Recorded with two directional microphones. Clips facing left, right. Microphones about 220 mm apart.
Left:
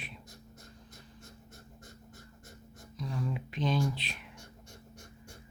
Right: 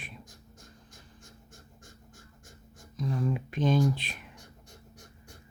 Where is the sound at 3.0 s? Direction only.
45° right (ahead or behind).